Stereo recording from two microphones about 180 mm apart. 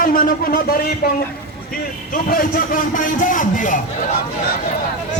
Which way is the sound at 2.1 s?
50° left (ahead or behind).